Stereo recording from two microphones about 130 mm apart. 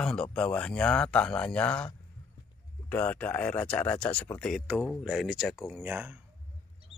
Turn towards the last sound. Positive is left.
turn(degrees=-15)  # may be behind; listen again after turning